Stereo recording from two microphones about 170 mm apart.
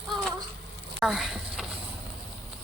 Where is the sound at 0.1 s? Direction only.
5° left (ahead or behind).